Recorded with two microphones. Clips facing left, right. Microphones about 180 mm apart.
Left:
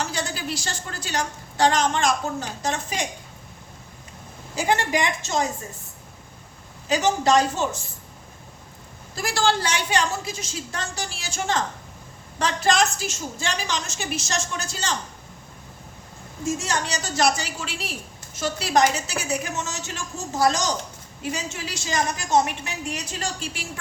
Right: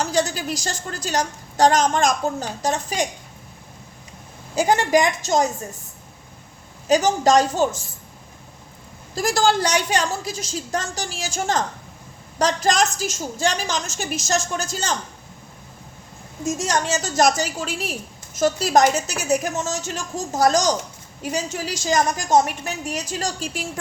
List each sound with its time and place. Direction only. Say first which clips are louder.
0.0 s a woman's voice: right 6 dB; 40° right (ahead or behind)
4.5 s a woman's voice: right 5 dB; 40° right (ahead or behind)
6.8 s a woman's voice: right 4 dB; 40° right (ahead or behind)
9.1 s a woman's voice: right 4 dB; 40° right (ahead or behind)
16.6 s a woman's voice: right 5 dB; 45° right (ahead or behind)